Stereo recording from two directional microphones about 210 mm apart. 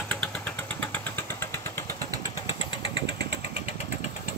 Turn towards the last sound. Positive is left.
turn(degrees=25)  # may be behind; listen again after turning